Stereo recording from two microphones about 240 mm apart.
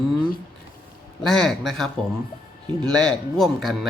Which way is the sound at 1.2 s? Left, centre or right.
Centre.